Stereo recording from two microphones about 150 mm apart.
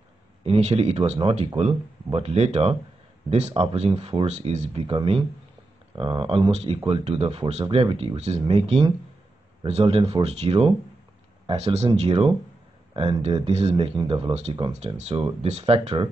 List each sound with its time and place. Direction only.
0.4 s speech: 40° right (ahead or behind)
12.9 s speech: 35° right (ahead or behind)